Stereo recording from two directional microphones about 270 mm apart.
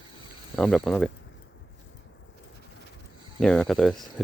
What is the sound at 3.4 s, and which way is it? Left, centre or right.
Speech, centre.